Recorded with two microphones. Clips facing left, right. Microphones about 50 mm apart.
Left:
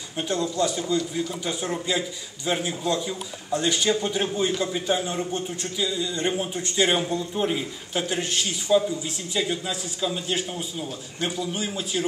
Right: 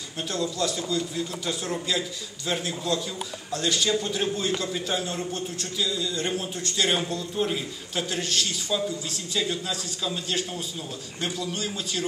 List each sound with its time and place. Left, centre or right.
0.3 s a man's voice: left